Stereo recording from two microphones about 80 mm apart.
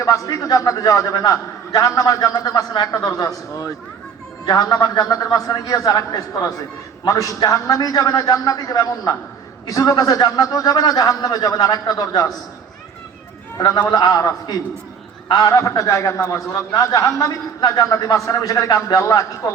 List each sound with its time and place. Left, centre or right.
0.0 s a man's voice: left
13.6 s a man's voice: left